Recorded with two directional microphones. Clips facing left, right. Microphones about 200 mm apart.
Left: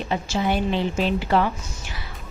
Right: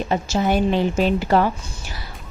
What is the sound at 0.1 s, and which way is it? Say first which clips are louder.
A woman's voice: right 3 dB; 45° right (ahead or behind).